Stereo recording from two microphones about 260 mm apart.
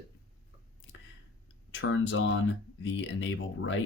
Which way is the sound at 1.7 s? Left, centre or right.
Left.